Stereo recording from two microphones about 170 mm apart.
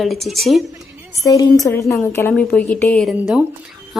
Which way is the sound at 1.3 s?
20° left (ahead or behind).